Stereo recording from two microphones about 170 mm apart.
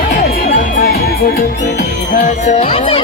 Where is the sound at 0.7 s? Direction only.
60° left (ahead or behind).